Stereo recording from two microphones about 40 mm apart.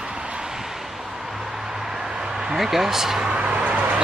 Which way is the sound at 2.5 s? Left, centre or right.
Centre.